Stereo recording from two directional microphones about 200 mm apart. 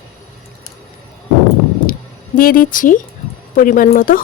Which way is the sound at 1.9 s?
45° left (ahead or behind).